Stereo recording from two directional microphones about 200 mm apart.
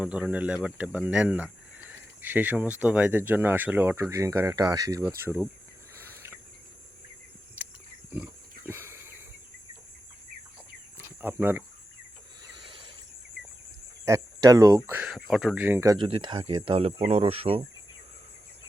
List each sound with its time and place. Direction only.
0.0 s speech: 5° right (ahead or behind)
6.0 s cricket: 10° right (ahead or behind)
8.1 s pig: 10° right (ahead or behind)
10.9 s cricket: 10° right (ahead or behind)
12.5 s a sound: 25° right (ahead or behind)
14.0 s speech: 15° right (ahead or behind)
16.0 s speech: 25° right (ahead or behind)